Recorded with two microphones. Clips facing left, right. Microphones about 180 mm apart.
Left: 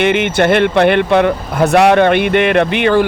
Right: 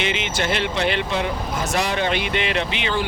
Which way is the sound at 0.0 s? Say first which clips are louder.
Left 12 dB; 60° left (ahead or behind).